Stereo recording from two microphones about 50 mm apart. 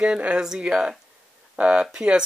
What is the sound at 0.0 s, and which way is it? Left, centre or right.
Speech, right.